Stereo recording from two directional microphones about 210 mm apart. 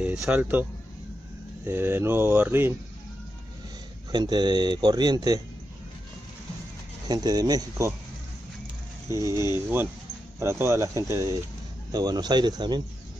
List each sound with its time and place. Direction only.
0.0 s speech: 5° right (ahead or behind)
1.7 s speech: 10° right (ahead or behind)
4.1 s speech: 20° right (ahead or behind)
7.1 s speech: 20° right (ahead or behind)
9.1 s speech: 15° right (ahead or behind)